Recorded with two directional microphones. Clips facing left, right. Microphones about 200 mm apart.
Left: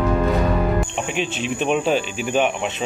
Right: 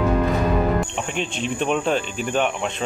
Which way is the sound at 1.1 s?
5° left (ahead or behind).